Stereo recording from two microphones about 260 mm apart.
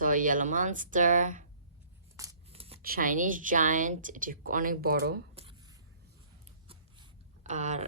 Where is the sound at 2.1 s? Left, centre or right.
Centre.